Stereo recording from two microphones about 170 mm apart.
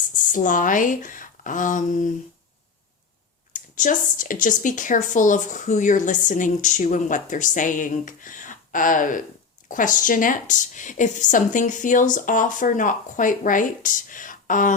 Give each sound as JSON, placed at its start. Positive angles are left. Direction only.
{"t": 0.1, "sound": "speech", "side_deg": 50}
{"t": 3.5, "sound": "speech", "side_deg": 50}